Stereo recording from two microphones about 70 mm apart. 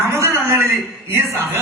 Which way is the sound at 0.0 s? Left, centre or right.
Right.